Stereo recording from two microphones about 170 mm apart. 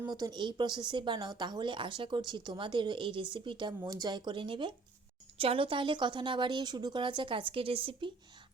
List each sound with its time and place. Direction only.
0.1 s a woman's voice: 25° right (ahead or behind)